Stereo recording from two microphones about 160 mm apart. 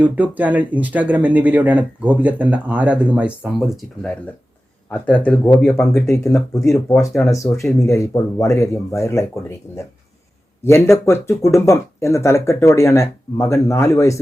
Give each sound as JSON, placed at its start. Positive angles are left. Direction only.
{"t": 0.0, "sound": "speech", "side_deg": -10}
{"t": 7.3, "sound": "speech", "side_deg": 20}